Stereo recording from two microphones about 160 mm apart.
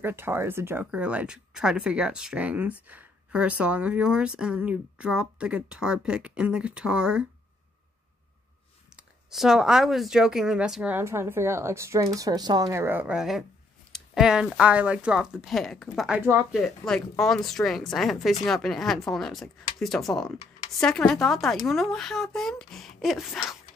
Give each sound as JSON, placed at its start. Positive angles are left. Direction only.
{"t": 0.0, "sound": "speech", "side_deg": -15}
{"t": 8.9, "sound": "speech", "side_deg": 0}
{"t": 16.2, "sound": "speech", "side_deg": -15}
{"t": 16.5, "sound": "speech", "side_deg": 0}